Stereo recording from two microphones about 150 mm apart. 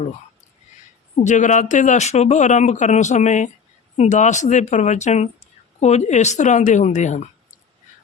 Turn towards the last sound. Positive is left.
turn(degrees=50)  # may be behind; listen again after turning